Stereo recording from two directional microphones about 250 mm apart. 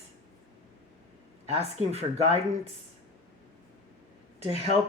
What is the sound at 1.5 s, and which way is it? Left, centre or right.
Speech, right.